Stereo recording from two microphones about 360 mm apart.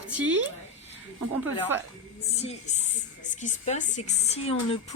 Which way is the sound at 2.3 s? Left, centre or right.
Centre.